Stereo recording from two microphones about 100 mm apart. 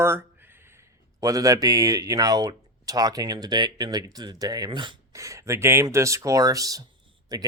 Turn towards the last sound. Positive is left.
turn(degrees=-40)  # may be behind; listen again after turning